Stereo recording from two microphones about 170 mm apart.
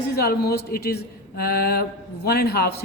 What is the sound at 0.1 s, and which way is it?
Speech, 65° left (ahead or behind).